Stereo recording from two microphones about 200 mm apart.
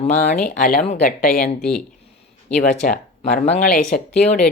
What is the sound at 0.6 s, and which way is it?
Speech, 40° left (ahead or behind).